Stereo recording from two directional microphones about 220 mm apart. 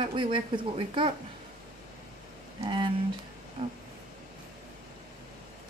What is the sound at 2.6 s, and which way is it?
Speech, 20° right (ahead or behind).